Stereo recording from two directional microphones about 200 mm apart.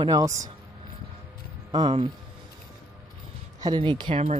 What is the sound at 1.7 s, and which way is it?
Speech, 25° right (ahead or behind).